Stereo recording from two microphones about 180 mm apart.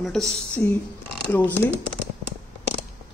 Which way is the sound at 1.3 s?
10° left (ahead or behind).